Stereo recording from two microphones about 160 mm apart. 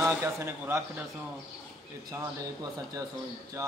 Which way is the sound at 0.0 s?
15° right (ahead or behind).